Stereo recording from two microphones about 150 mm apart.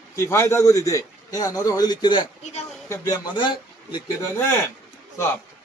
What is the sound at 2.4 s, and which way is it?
Speech, 45° left (ahead or behind).